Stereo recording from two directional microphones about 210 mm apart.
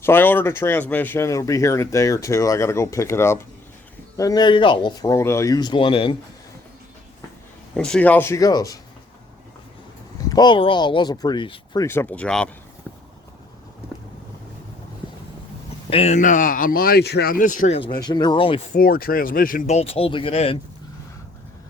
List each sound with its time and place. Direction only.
0.0 s speech: 10° left (ahead or behind)
7.8 s speech: 5° left (ahead or behind)
10.2 s speech: 20° left (ahead or behind); by 12.5 s 5° left (ahead or behind)
15.9 s speech: 30° left (ahead or behind)
17.7 s speech: 20° left (ahead or behind)
18.7 s speech: 45° left (ahead or behind); by 20.6 s 25° left (ahead or behind)